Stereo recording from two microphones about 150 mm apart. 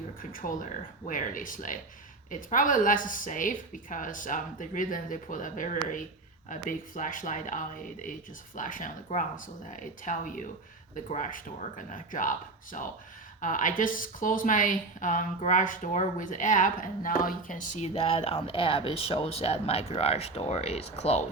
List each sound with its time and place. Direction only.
0.2 s a woman's voice: 65° left (ahead or behind)
13.4 s speech: 60° left (ahead or behind); by 21.2 s 45° left (ahead or behind)